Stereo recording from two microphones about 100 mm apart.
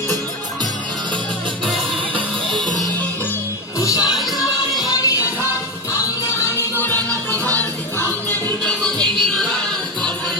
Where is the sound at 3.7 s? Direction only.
35° left (ahead or behind).